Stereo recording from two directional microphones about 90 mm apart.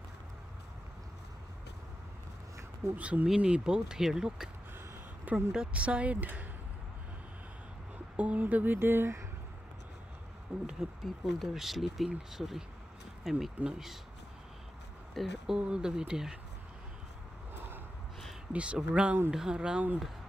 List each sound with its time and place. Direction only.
3.0 s speech: 15° right (ahead or behind)
5.5 s speech: 10° right (ahead or behind)
8.2 s speech: 15° right (ahead or behind)
10.5 s speech: 15° right (ahead or behind)
11.3 s speech: centre (ahead or behind)
15.1 s speech: 5° right (ahead or behind)
18.5 s speech: 15° right (ahead or behind)